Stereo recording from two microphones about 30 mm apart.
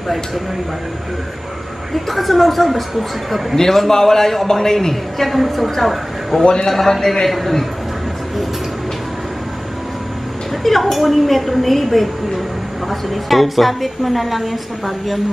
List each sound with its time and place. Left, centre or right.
2.0 s a woman's voice: centre
3.5 s a man's voice: centre
5.2 s a woman's voice: centre
10.6 s a woman's voice: centre
13.1 s a woman's voice: centre